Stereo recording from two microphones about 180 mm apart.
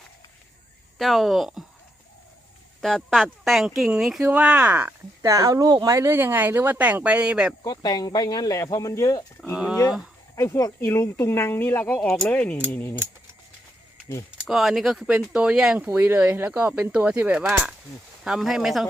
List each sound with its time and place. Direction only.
0.9 s speech: centre (ahead or behind)
2.8 s speech: 5° left (ahead or behind)
7.6 s speech: 20° left (ahead or behind)
10.3 s speech: 15° left (ahead or behind)
14.3 s speech: centre (ahead or behind)